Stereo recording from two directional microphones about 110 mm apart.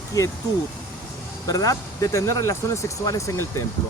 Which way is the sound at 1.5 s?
35° left (ahead or behind).